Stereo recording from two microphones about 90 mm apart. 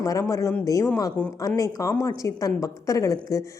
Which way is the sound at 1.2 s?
15° left (ahead or behind).